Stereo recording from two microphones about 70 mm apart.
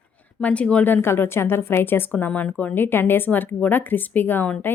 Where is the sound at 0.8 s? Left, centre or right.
Left.